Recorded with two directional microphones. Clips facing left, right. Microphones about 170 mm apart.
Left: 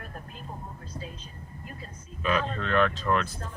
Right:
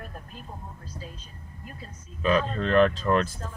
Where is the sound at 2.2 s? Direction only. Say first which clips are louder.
Right 4 dB; 35° right (ahead or behind).